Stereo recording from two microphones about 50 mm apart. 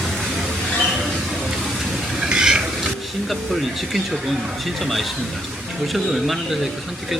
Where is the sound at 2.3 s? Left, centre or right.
Centre.